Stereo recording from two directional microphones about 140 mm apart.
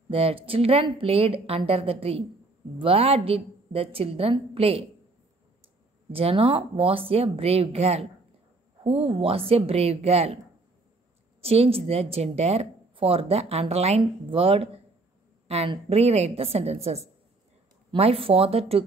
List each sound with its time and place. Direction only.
0.1 s speech: 45° right (ahead or behind)
6.1 s speech: 40° right (ahead or behind)
11.4 s speech: 45° right (ahead or behind)
15.4 s a sound: 50° right (ahead or behind)
15.9 s speech: 50° right (ahead or behind)